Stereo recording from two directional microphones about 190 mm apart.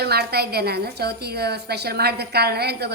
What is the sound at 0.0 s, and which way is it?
A woman's voice, 55° right (ahead or behind).